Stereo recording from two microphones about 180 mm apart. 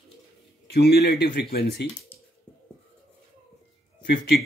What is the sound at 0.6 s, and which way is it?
Speech, 65° left (ahead or behind).